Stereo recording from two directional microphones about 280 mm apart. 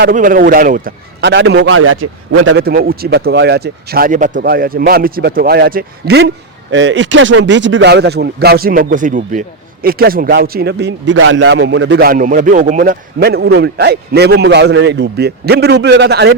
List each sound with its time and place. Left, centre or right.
0.0 s speech: right
2.6 s speech: right